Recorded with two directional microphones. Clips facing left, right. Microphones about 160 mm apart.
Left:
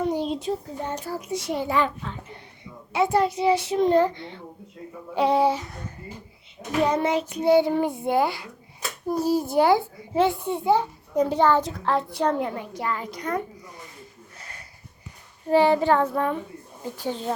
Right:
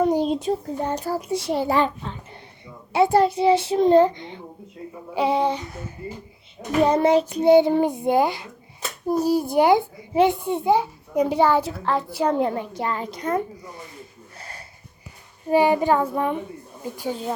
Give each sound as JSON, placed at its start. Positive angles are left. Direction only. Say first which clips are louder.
{"t": 0.0, "sound": "a child's voice", "louder": "right 5 dB", "side_deg": -45}
{"t": 5.1, "sound": "a sound", "louder": "left 1 dB", "side_deg": 0}
{"t": 6.8, "sound": "a child's voice", "louder": "right 6 dB", "side_deg": -30}
{"t": 7.4, "sound": "a child's voice", "louder": "right 3 dB", "side_deg": -20}
{"t": 12.4, "sound": "a child's voice", "louder": "right 5 dB", "side_deg": -30}
{"t": 14.3, "sound": "wheeze", "louder": "right 6 dB", "side_deg": -30}
{"t": 15.4, "sound": "a child's voice", "louder": "right 1 dB", "side_deg": -15}